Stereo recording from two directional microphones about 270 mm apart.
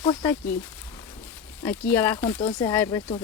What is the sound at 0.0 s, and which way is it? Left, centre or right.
Speech, centre.